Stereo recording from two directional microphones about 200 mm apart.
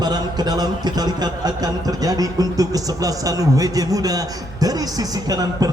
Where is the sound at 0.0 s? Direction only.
20° right (ahead or behind).